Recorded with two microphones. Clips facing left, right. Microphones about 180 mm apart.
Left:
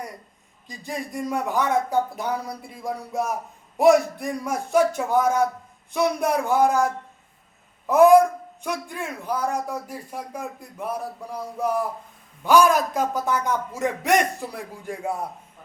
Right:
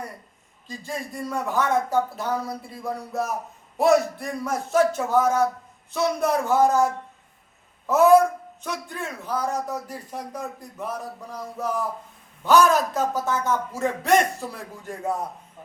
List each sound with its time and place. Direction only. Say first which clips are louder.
0.7 s a man's voice: left 1 dB; 15° left (ahead or behind)
7.9 s a man's voice: left 2 dB; 15° left (ahead or behind)
12.5 s a man's voice: left 1 dB; 10° left (ahead or behind)